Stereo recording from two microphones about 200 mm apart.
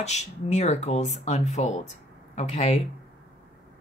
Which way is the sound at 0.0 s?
35° left (ahead or behind).